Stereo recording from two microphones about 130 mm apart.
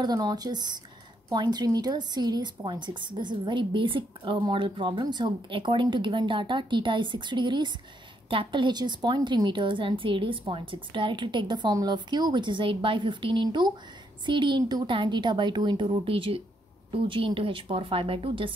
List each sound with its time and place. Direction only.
0.0 s a woman's voice: 30° right (ahead or behind)